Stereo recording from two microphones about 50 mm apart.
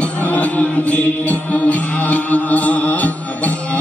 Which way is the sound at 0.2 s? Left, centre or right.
Left.